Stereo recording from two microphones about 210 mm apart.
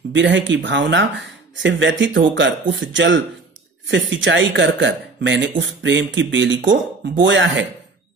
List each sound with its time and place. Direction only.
0.1 s speech: 60° right (ahead or behind)